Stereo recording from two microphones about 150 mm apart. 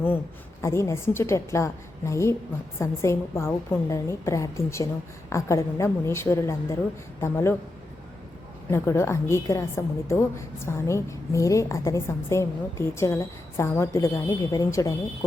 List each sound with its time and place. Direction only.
0.6 s a woman's voice: 20° left (ahead or behind)
8.7 s a woman's voice: 15° left (ahead or behind)